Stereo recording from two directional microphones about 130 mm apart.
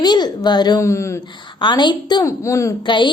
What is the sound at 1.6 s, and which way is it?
Speech, 35° left (ahead or behind).